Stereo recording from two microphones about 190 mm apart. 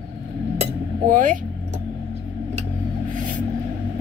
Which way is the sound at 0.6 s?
40° right (ahead or behind).